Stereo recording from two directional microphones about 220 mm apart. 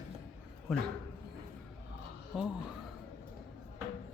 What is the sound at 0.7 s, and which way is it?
Speech, centre (ahead or behind).